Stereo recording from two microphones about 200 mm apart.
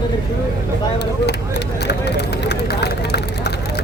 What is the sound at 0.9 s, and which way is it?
Vehicle, 55° left (ahead or behind).